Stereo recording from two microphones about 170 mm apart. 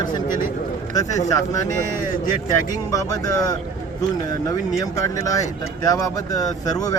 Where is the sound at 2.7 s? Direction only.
20° left (ahead or behind).